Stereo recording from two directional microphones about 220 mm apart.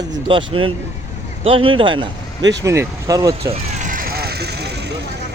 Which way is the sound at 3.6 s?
35° right (ahead or behind).